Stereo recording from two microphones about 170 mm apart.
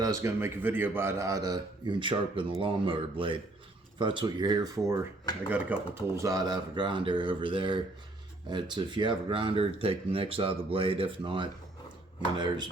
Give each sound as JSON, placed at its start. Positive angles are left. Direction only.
{"t": 0.0, "sound": "a man's voice", "side_deg": -20}